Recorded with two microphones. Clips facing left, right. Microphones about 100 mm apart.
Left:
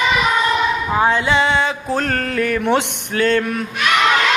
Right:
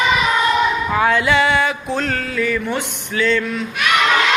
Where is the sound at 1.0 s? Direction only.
25° left (ahead or behind).